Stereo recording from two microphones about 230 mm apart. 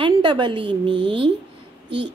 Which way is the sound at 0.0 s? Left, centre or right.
Right.